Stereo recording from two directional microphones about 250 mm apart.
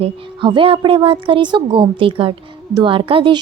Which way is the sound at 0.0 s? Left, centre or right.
Right.